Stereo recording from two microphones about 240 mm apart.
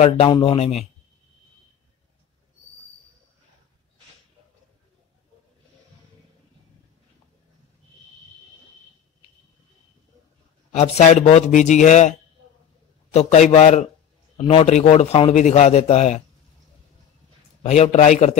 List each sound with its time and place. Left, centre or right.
0.0 s a man's voice: left
10.7 s a man's voice: left
17.6 s a man's voice: left